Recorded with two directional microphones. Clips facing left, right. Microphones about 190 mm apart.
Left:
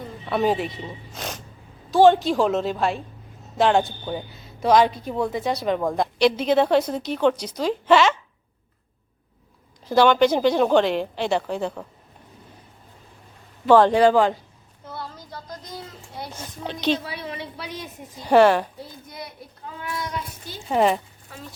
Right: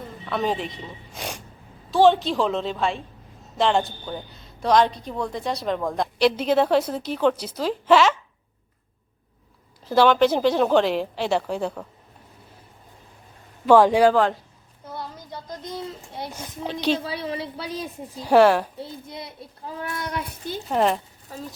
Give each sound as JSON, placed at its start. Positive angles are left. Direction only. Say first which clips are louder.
{"t": 0.3, "sound": "a woman's voice", "louder": "left 4 dB", "side_deg": 5}
{"t": 1.1, "sound": "snort", "louder": "right 1 dB", "side_deg": -10}
{"t": 1.9, "sound": "a woman's voice", "louder": "left 2 dB", "side_deg": 0}
{"t": 9.9, "sound": "a woman's voice", "louder": "left 1 dB", "side_deg": -5}
{"t": 13.7, "sound": "speech", "louder": "even", "side_deg": -10}
{"t": 14.9, "sound": "speech", "louder": "right 1 dB", "side_deg": -20}
{"t": 16.3, "sound": "speech", "louder": "right 1 dB", "side_deg": -10}
{"t": 17.0, "sound": "a child's voice", "louder": "right 4 dB", "side_deg": -30}
{"t": 18.2, "sound": "a woman's voice", "louder": "even", "side_deg": 0}
{"t": 18.8, "sound": "a child's voice", "louder": "right 2 dB", "side_deg": -25}
{"t": 20.0, "sound": "speech", "louder": "right 1 dB", "side_deg": -60}
{"t": 20.7, "sound": "a woman's voice", "louder": "left 2 dB", "side_deg": 5}
{"t": 21.3, "sound": "speech", "louder": "right 5 dB", "side_deg": -40}